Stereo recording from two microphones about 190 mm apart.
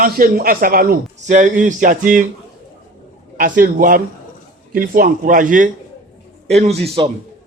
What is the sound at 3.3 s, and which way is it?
A man's voice, 45° right (ahead or behind).